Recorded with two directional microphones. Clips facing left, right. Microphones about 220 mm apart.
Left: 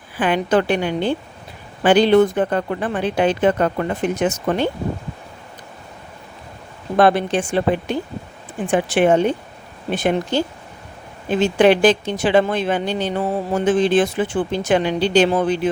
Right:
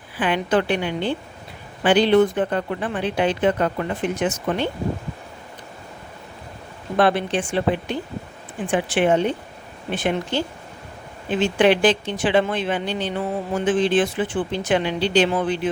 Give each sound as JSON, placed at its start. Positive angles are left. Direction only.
{"t": 0.2, "sound": "speech", "side_deg": 45}
{"t": 6.9, "sound": "speech", "side_deg": 45}